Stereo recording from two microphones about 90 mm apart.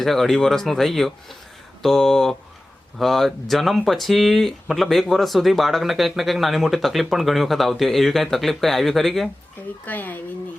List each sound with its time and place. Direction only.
0.0 s speech: centre (ahead or behind)
9.8 s speech: 20° left (ahead or behind)